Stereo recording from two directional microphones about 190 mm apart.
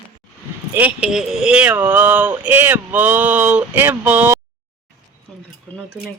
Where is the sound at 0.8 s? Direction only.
5° right (ahead or behind).